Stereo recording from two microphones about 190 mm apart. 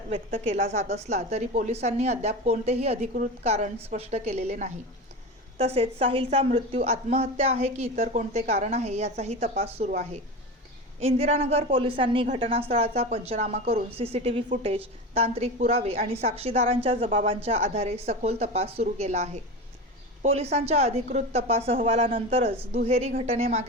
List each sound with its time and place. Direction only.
0.1 s a woman's voice: 30° right (ahead or behind)
11.0 s a woman's voice: 30° right (ahead or behind)